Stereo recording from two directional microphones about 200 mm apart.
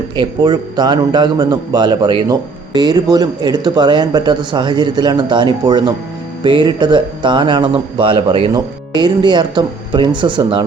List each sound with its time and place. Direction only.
0.2 s a man's voice: 20° right (ahead or behind)